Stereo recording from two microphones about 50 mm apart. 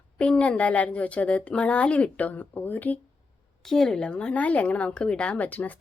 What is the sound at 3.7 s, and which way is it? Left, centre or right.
A woman's voice, centre.